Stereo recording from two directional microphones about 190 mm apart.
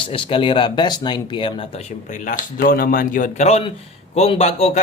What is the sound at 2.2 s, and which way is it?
Speech, 50° left (ahead or behind).